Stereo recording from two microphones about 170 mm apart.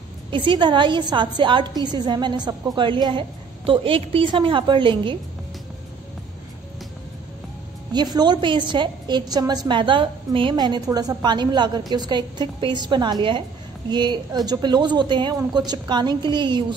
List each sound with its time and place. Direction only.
0.3 s a woman's voice: 30° right (ahead or behind)
7.9 s a woman's voice: 25° right (ahead or behind)